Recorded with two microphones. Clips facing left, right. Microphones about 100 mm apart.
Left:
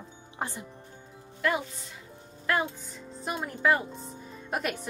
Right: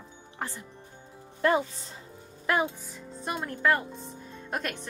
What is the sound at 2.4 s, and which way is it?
Speech, 15° right (ahead or behind).